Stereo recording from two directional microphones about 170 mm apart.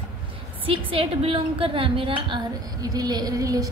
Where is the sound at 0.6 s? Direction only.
35° right (ahead or behind).